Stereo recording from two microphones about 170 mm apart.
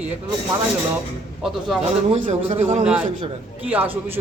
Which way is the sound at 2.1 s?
35° right (ahead or behind).